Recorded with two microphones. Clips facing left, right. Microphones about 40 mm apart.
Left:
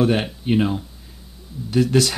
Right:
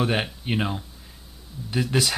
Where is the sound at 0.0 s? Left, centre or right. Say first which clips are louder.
Left 5 dB; centre.